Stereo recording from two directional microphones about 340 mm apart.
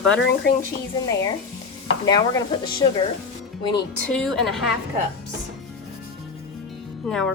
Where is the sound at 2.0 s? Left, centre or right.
Centre.